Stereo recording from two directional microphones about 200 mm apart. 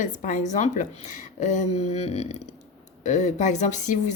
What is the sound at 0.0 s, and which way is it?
Speech, 40° left (ahead or behind).